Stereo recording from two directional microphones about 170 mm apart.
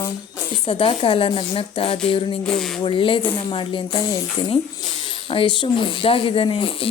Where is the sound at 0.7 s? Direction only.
30° left (ahead or behind).